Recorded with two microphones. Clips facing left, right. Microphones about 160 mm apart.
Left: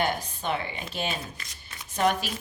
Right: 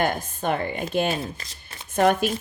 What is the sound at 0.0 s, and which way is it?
Speech, 50° right (ahead or behind).